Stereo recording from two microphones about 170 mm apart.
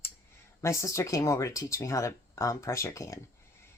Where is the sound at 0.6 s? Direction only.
20° left (ahead or behind).